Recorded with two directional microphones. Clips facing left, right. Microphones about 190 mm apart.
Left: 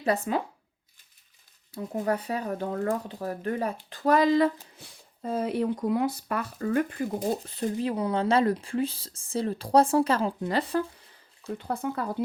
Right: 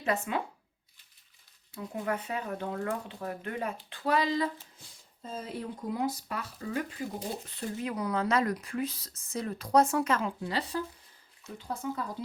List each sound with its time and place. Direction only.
0.0 s speech: 35° left (ahead or behind)
1.7 s speech: 40° left (ahead or behind)
7.8 s speech: 30° left (ahead or behind)
10.5 s speech: 55° left (ahead or behind)